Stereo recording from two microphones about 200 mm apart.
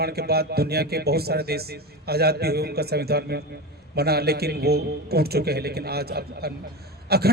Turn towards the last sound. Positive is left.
turn(degrees=-50)  # may be behind; listen again after turning